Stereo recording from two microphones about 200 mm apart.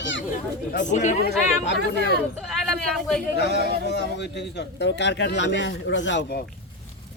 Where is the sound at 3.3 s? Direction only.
55° left (ahead or behind).